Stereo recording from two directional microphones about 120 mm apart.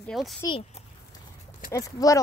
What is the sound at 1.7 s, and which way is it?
Speech, 30° left (ahead or behind).